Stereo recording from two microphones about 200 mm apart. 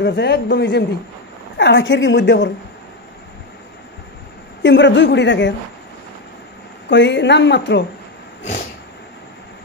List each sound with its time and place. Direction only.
0.0 s a woman's voice: 60° left (ahead or behind)
4.6 s a woman's voice: 60° left (ahead or behind)
6.9 s a woman's voice: 60° left (ahead or behind)